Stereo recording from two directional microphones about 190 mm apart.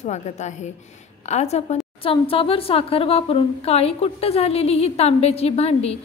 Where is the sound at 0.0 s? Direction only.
40° left (ahead or behind).